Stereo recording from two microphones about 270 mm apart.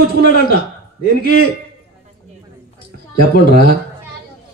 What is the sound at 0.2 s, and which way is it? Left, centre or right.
A man's voice, right.